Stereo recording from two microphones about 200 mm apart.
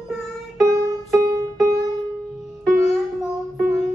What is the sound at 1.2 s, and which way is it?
Music, 15° right (ahead or behind).